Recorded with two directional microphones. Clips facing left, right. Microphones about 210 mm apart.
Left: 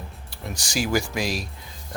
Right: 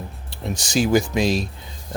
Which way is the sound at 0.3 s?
25° right (ahead or behind).